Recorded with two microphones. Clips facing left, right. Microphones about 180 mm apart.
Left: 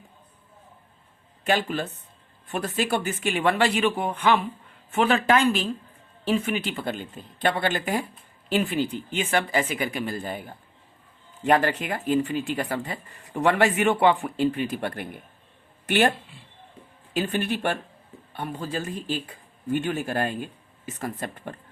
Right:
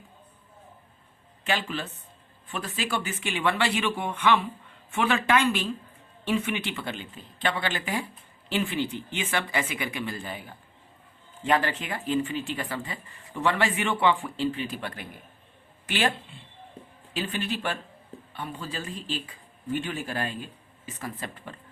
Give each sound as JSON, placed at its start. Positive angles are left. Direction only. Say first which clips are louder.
{"t": 1.5, "sound": "speech", "louder": "left 5 dB", "side_deg": 45}
{"t": 17.2, "sound": "speech", "louder": "left 5 dB", "side_deg": 50}